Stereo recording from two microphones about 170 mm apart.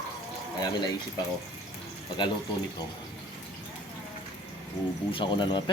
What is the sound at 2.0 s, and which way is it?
Speech, 25° left (ahead or behind).